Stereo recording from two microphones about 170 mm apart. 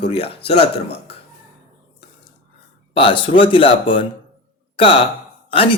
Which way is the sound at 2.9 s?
30° left (ahead or behind).